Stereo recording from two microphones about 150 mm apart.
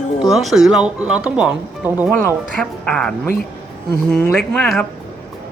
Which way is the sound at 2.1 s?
10° left (ahead or behind).